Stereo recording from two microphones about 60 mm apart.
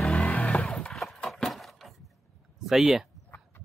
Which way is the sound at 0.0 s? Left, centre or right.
Centre.